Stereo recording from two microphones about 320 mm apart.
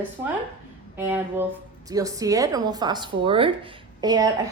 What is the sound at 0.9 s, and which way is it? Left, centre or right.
A woman's voice, centre.